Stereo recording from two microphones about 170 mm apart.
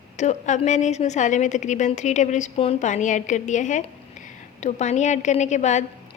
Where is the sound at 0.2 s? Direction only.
45° left (ahead or behind).